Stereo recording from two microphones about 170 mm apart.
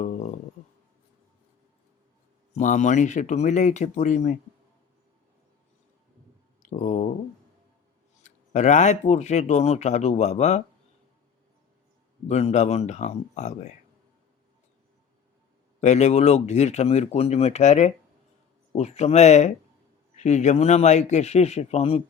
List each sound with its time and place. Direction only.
0.0 s a sound: 45° left (ahead or behind)
2.6 s speech: 45° left (ahead or behind)
6.6 s a sound: 45° left (ahead or behind)
8.2 s speech: 45° left (ahead or behind)
12.3 s speech: 40° left (ahead or behind)
15.8 s speech: 45° left (ahead or behind)